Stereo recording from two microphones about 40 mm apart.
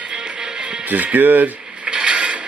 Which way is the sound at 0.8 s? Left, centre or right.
Right.